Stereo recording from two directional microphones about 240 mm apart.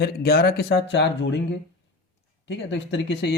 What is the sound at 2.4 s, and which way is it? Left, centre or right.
Speech, left.